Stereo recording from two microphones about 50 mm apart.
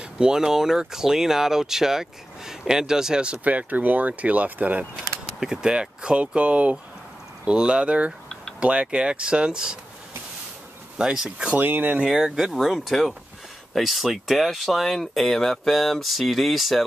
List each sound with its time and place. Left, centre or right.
0.0 s speech: centre
3.4 s speech: right
5.4 s speech: centre
11.0 s speech: centre
11.6 s speech: right
12.1 s speech: centre